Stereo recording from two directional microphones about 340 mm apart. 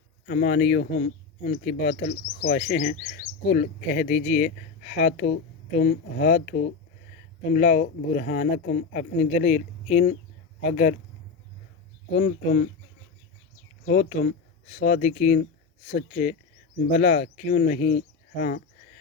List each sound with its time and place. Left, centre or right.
0.3 s speech: left
7.5 s speech: left
12.1 s speech: left
13.8 s speech: left